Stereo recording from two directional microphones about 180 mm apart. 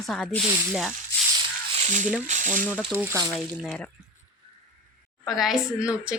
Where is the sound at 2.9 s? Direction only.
15° right (ahead or behind).